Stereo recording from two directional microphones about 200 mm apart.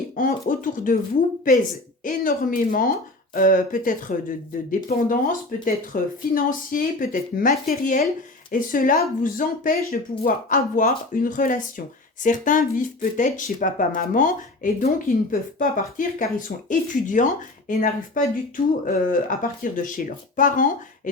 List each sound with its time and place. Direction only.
0.2 s speech: 45° left (ahead or behind)
2.0 s speech: 45° left (ahead or behind)